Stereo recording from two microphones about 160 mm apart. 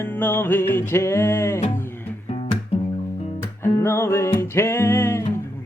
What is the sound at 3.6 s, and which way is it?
Music, 15° left (ahead or behind).